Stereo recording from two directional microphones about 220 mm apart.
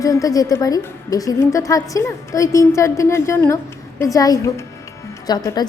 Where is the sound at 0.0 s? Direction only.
15° left (ahead or behind).